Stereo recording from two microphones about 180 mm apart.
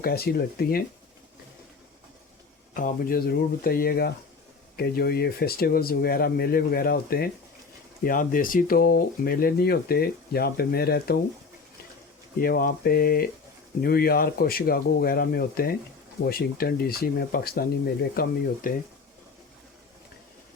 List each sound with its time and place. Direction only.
0.0 s speech: 60° left (ahead or behind)
2.7 s speech: 50° left (ahead or behind)
12.4 s speech: 50° left (ahead or behind)